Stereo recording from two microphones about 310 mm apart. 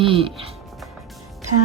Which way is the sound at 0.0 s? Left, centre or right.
Centre.